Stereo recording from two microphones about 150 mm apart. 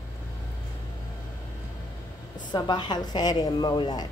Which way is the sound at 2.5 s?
30° left (ahead or behind).